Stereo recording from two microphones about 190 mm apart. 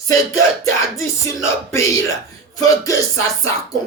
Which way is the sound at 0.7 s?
15° left (ahead or behind).